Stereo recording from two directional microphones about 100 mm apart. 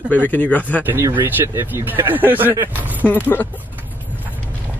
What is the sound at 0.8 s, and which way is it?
Speech, 20° right (ahead or behind).